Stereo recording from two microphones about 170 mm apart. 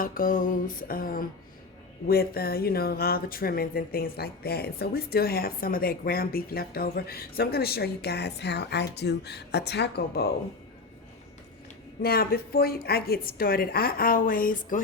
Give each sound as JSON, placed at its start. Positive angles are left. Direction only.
{"t": 0.0, "sound": "speech", "side_deg": 55}
{"t": 12.0, "sound": "speech", "side_deg": 65}